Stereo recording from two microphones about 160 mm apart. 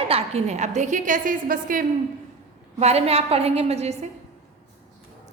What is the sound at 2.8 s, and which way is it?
A woman's voice, 40° right (ahead or behind).